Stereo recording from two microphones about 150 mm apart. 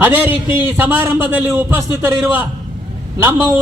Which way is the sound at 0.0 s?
10° right (ahead or behind).